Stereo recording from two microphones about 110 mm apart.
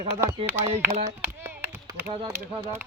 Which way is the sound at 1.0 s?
25° right (ahead or behind).